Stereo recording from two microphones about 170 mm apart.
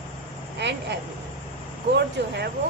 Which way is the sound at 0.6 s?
90° right.